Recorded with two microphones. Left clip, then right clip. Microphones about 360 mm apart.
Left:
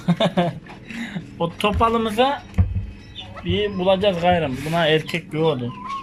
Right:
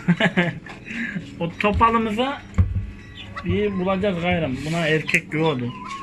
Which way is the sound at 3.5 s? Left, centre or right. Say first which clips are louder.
Left 4 dB; left.